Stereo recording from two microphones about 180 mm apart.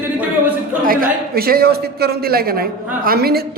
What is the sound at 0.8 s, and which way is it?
Speech, 55° right (ahead or behind).